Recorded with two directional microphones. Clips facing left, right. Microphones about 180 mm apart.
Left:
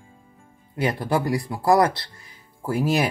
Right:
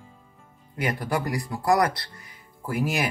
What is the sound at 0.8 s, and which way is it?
Speech, 25° left (ahead or behind).